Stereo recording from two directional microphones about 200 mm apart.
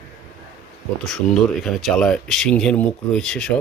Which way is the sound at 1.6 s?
Centre (ahead or behind).